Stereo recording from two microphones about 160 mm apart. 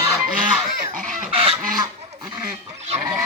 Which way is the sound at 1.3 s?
35° right (ahead or behind).